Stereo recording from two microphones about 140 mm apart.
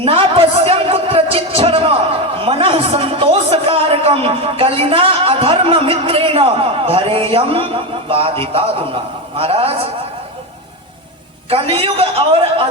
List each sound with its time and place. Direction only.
0.0 s music: 40° right (ahead or behind)
2.4 s a man's voice: 40° right (ahead or behind)
11.7 s a man's voice: 40° right (ahead or behind)